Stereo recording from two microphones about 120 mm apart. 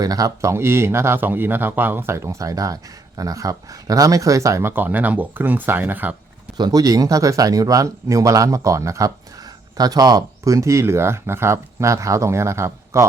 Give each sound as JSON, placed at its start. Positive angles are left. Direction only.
{"t": 0.0, "sound": "speech", "side_deg": -30}
{"t": 6.6, "sound": "speech", "side_deg": -30}